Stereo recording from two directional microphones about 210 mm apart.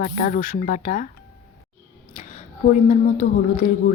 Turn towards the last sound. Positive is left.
turn(degrees=35)  # may be behind; listen again after turning